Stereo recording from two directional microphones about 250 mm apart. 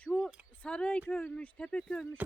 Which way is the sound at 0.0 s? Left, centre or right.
Centre.